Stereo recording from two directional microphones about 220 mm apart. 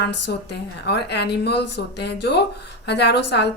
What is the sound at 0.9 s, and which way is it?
Speech, 50° left (ahead or behind).